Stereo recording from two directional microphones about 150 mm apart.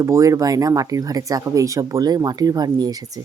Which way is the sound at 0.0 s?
20° right (ahead or behind).